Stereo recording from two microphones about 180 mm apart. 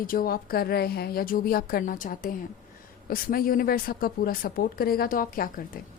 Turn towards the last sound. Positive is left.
turn(degrees=50)  # may be behind; listen again after turning